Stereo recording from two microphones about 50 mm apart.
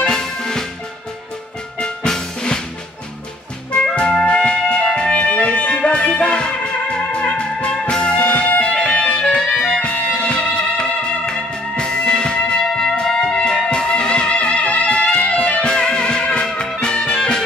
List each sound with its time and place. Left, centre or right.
0.1 s music: centre
1.8 s music: centre
3.9 s music: centre